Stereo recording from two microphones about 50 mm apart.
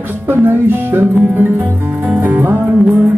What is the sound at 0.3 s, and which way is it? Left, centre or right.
Speech, right.